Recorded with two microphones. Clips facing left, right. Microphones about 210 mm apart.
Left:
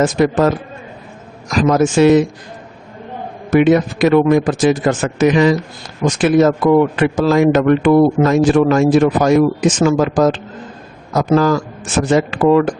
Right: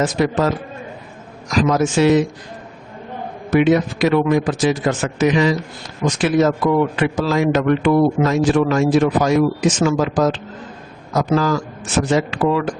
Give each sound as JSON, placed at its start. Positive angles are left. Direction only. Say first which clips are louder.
{"t": 0.0, "sound": "a man's voice", "louder": "left 4 dB", "side_deg": 50}
{"t": 3.5, "sound": "a man's voice", "louder": "left 3 dB", "side_deg": 50}